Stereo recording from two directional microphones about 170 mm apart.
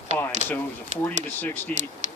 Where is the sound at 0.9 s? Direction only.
40° right (ahead or behind).